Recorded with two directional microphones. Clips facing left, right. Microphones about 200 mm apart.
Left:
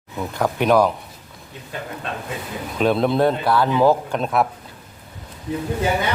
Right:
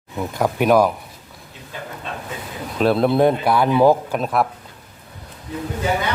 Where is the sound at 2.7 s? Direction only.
Centre (ahead or behind).